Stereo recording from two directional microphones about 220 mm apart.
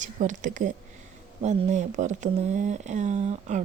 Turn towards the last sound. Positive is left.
turn(degrees=-30)  # may be behind; listen again after turning